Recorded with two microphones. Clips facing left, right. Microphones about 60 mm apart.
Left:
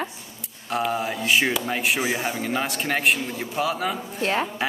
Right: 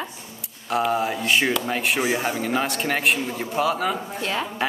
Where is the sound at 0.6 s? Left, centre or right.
Centre.